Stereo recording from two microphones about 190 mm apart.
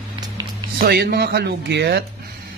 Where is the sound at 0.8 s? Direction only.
55° right (ahead or behind).